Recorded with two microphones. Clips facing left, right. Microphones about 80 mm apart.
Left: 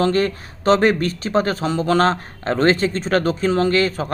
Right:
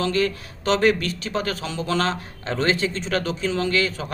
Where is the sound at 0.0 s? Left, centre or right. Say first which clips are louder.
Left 4 dB; left.